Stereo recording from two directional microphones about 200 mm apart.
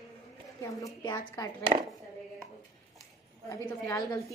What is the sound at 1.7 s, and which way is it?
Speech, 30° right (ahead or behind).